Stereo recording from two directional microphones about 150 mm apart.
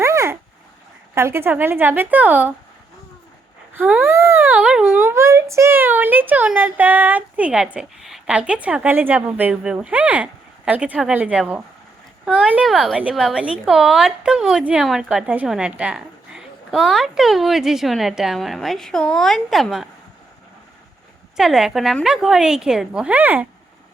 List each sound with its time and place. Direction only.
0.0 s a sound: 20° right (ahead or behind)
1.1 s speech: 15° right (ahead or behind)
3.8 s a woman's voice: 10° right (ahead or behind)
21.3 s a woman's voice: 5° right (ahead or behind)